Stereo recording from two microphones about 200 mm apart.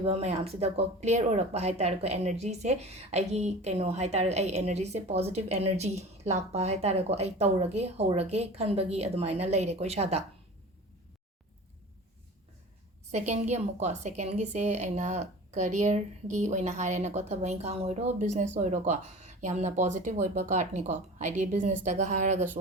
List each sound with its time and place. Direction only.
0.0 s speech: 30° right (ahead or behind)
13.1 s speech: 35° right (ahead or behind)